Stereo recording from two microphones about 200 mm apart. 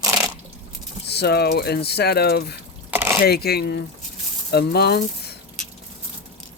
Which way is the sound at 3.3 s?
50° left (ahead or behind).